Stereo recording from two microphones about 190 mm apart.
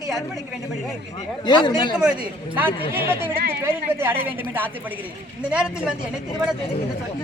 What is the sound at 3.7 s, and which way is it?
A woman's voice, 10° right (ahead or behind).